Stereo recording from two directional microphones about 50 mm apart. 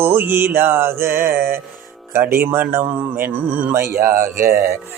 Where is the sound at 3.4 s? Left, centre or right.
Right.